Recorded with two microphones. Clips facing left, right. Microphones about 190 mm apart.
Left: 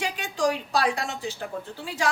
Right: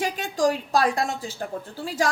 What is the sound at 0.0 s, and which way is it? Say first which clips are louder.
A woman's voice: right 3 dB; 45° right (ahead or behind).